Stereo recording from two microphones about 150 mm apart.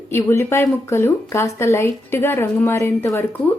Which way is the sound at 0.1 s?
15° left (ahead or behind).